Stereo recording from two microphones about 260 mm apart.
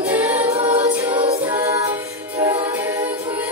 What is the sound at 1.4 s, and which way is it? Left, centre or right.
A capella, centre.